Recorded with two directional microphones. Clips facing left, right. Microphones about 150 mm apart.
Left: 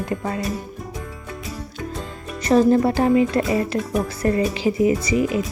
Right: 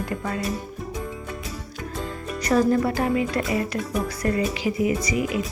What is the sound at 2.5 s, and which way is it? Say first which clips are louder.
Speech: left 5 dB; 25° left (ahead or behind).